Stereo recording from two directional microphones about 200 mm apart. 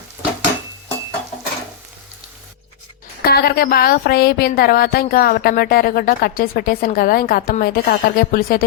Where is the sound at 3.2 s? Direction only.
50° left (ahead or behind).